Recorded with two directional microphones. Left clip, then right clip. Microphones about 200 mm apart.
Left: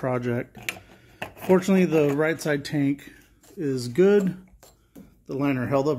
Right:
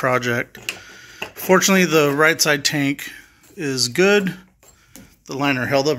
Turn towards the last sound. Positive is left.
turn(degrees=0)  # may be behind; listen again after turning